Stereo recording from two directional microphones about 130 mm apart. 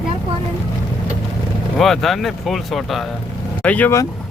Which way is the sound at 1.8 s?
Centre (ahead or behind).